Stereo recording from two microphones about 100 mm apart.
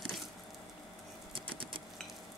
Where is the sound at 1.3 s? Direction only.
60° right (ahead or behind).